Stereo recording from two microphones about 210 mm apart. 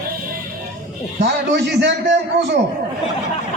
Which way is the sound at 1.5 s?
55° right (ahead or behind).